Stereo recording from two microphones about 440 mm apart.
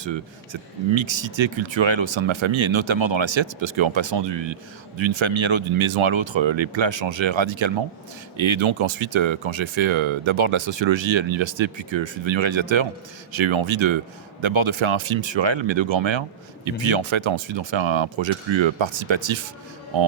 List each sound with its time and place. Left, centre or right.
0.0 s speech: right
4.9 s speech: right